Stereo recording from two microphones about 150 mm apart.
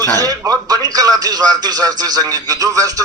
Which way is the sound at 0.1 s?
25° right (ahead or behind).